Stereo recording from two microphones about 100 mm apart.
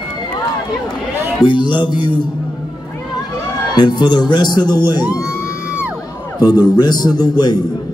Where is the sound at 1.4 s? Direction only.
50° left (ahead or behind).